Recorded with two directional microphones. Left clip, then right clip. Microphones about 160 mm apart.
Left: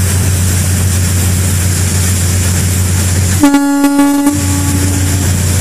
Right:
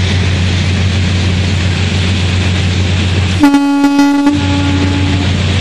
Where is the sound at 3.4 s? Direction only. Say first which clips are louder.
Even; 45° right (ahead or behind).